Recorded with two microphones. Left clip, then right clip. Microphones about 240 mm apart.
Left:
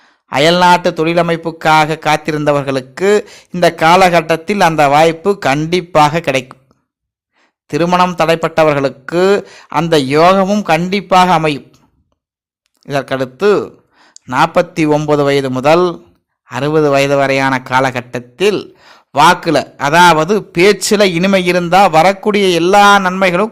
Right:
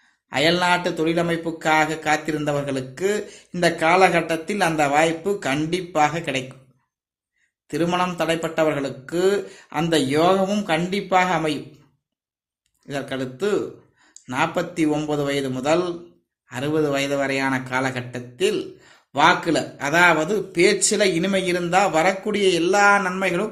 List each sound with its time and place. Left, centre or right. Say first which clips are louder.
0.3 s a man's voice: left 10 dB; left
7.7 s a man's voice: left 11 dB; left
12.8 s a man's voice: left 12 dB; left